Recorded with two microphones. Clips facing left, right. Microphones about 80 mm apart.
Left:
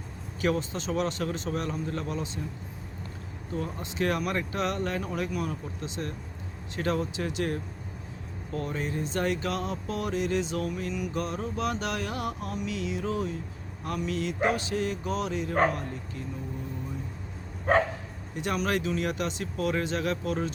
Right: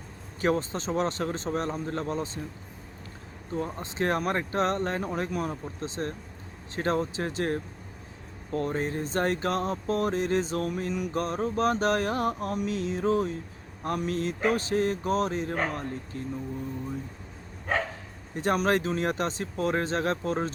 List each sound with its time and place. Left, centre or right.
0.4 s speech: right
3.5 s speech: right
18.3 s speech: right